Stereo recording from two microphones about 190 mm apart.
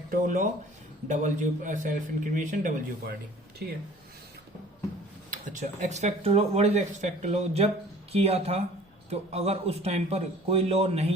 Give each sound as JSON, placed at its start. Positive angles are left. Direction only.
{"t": 0.1, "sound": "a man's voice", "side_deg": -45}
{"t": 5.3, "sound": "speech", "side_deg": -40}